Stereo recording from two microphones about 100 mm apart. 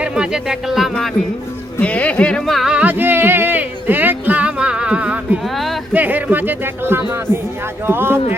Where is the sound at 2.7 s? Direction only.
15° right (ahead or behind).